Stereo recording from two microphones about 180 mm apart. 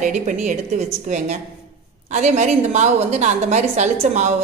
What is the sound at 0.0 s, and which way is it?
A woman's voice, 45° right (ahead or behind).